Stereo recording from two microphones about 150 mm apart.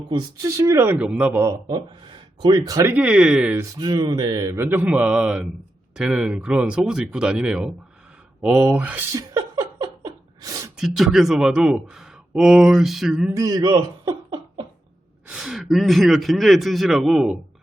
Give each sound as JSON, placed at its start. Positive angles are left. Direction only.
{"t": 0.1, "sound": "speech", "side_deg": -25}
{"t": 1.3, "sound": "speech", "side_deg": -20}
{"t": 2.9, "sound": "a man's voice", "side_deg": -10}
{"t": 3.8, "sound": "a man's voice", "side_deg": -25}
{"t": 9.1, "sound": "a sound", "side_deg": -25}
{"t": 10.8, "sound": "speech", "side_deg": 0}
{"t": 13.3, "sound": "speech", "side_deg": -25}
{"t": 15.3, "sound": "speech", "side_deg": -5}